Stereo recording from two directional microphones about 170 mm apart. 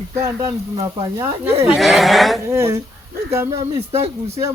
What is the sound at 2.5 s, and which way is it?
Speech, 15° right (ahead or behind).